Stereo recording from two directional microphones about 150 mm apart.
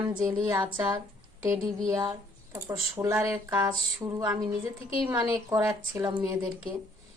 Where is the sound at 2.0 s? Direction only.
25° right (ahead or behind); by 3.6 s 10° right (ahead or behind).